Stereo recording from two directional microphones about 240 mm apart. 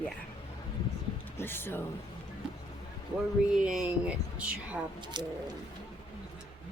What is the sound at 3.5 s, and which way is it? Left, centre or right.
Speech, centre.